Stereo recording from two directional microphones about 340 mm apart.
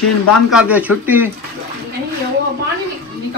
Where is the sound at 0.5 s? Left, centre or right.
Centre.